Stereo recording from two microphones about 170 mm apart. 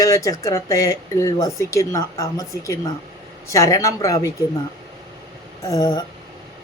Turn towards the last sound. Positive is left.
turn(degrees=20)  # may be behind; listen again after turning